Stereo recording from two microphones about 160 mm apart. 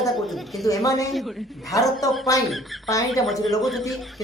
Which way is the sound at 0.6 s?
20° left (ahead or behind).